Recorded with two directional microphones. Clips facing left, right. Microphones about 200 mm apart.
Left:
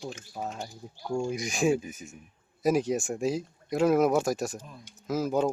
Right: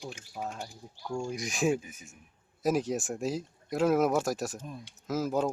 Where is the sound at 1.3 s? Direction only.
Centre (ahead or behind).